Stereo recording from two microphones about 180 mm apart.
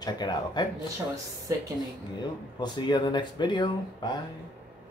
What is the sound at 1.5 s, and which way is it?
Speech, 15° right (ahead or behind).